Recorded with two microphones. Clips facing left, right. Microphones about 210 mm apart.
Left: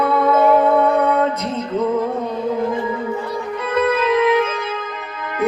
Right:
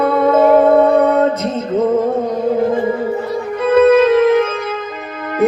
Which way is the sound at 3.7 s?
45° right (ahead or behind).